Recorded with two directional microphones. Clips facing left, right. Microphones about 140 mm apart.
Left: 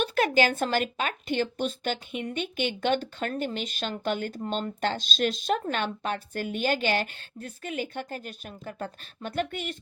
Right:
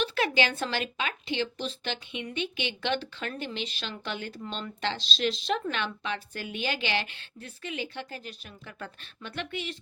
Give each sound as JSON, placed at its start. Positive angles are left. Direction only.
{"t": 0.0, "sound": "speech", "side_deg": 45}